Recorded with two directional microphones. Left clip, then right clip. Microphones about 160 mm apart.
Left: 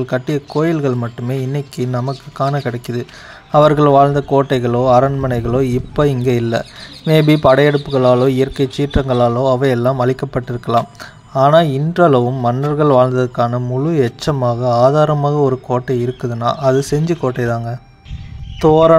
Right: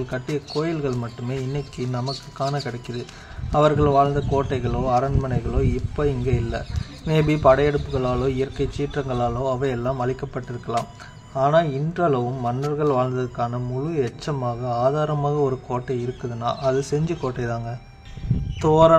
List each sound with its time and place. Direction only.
0.0 s speech: 40° left (ahead or behind)